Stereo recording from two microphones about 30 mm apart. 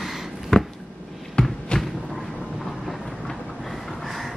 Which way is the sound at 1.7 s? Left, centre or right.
Left.